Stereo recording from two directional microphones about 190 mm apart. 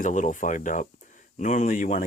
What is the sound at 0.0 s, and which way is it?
Speech, 40° left (ahead or behind).